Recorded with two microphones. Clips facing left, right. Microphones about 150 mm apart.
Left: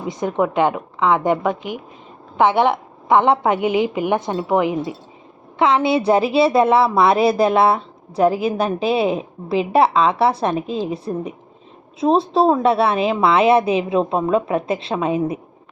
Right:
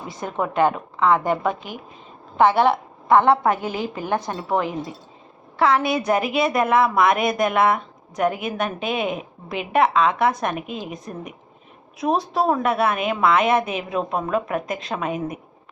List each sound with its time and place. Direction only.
0.1 s a woman's voice: 20° left (ahead or behind)